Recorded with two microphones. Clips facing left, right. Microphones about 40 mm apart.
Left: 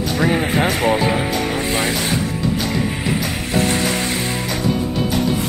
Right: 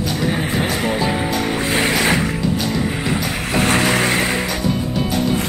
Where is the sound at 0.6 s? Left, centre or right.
Centre.